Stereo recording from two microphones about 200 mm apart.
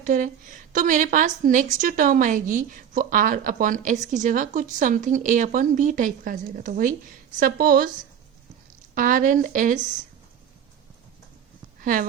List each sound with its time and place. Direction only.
0.0 s a woman's voice: 40° right (ahead or behind)
9.0 s a woman's voice: 40° right (ahead or behind)
11.8 s speech: 45° right (ahead or behind)